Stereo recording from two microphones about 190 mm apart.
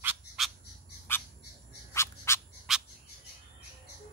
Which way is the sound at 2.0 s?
15° left (ahead or behind).